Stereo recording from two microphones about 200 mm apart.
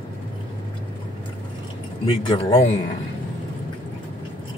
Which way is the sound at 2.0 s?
25° left (ahead or behind).